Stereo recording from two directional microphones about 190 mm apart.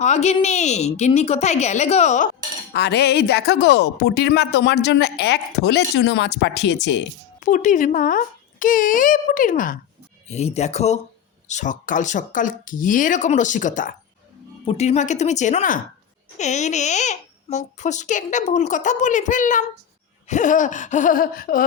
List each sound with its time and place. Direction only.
0.0 s a child's voice: 35° left (ahead or behind)
2.7 s a woman's voice: 60° left (ahead or behind)
7.3 s speech: 40° left (ahead or behind)
10.2 s a child's voice: 35° left (ahead or behind)